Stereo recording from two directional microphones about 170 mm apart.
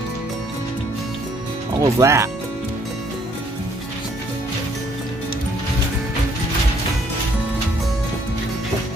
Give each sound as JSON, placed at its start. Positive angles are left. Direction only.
{"t": 1.8, "sound": "speech", "side_deg": -15}